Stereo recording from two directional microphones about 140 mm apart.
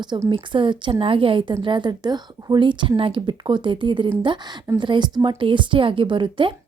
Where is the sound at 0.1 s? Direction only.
35° right (ahead or behind).